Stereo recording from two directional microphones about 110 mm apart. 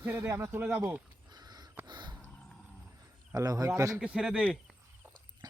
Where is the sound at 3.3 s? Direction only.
30° right (ahead or behind).